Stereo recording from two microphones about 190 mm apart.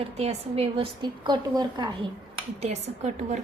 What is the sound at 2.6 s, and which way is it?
Speech, 35° right (ahead or behind).